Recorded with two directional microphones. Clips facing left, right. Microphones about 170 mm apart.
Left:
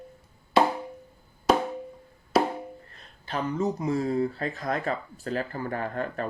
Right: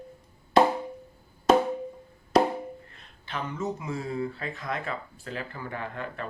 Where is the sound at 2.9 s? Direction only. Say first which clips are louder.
Left 4 dB; 40° left (ahead or behind).